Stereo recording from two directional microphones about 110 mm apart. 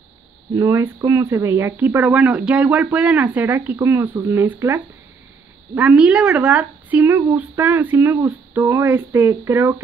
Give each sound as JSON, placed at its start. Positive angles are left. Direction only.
{"t": 0.6, "sound": "a woman's voice", "side_deg": -25}